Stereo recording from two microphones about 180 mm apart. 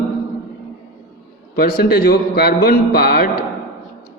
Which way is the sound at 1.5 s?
55° left (ahead or behind).